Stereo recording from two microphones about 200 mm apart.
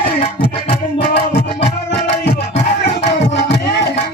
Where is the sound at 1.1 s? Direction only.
60° left (ahead or behind).